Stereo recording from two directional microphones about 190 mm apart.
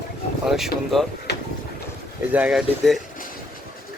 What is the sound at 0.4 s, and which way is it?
Speech, centre (ahead or behind).